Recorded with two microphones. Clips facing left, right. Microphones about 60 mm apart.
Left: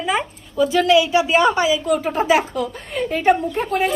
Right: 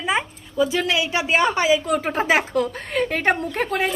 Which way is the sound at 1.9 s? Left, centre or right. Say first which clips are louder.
Left 3 dB; right.